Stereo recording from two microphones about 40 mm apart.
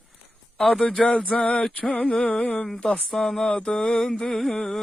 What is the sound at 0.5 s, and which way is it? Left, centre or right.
Speech, centre.